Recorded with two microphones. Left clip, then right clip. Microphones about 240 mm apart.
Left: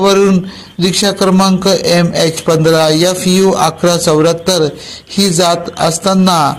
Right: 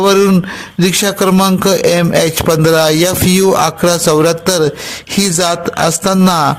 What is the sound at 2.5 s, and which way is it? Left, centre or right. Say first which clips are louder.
Speech: left 1 dB; right.